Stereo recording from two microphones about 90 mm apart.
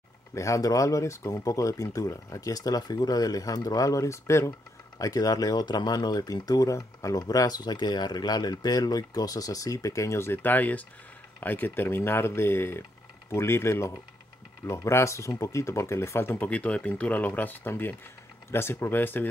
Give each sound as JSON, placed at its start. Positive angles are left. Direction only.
{"t": 0.3, "sound": "speech", "side_deg": 35}